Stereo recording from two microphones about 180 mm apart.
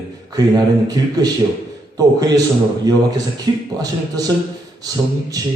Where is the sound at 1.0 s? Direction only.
20° right (ahead or behind).